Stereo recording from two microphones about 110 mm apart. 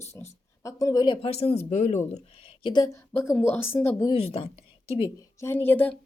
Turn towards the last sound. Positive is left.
turn(degrees=20)  # may be behind; listen again after turning